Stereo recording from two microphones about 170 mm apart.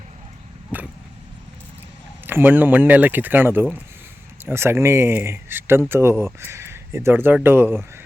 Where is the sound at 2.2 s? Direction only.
10° right (ahead or behind).